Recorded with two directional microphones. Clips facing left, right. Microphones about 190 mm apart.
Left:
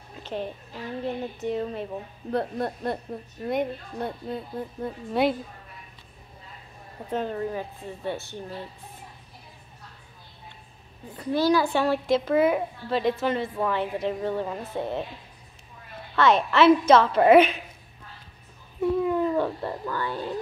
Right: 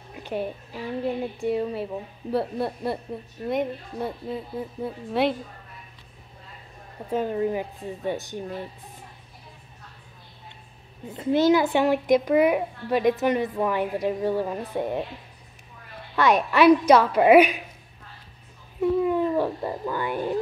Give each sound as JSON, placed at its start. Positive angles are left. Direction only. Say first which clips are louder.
{"t": 0.1, "sound": "a child's voice", "louder": "right 3 dB", "side_deg": -10}
{"t": 7.1, "sound": "a child's voice", "louder": "right 4 dB", "side_deg": -10}
{"t": 11.1, "sound": "a child's voice", "louder": "right 3 dB", "side_deg": -25}
{"t": 16.2, "sound": "a child's voice", "louder": "even", "side_deg": -15}
{"t": 18.8, "sound": "a sound", "louder": "right 2 dB", "side_deg": 0}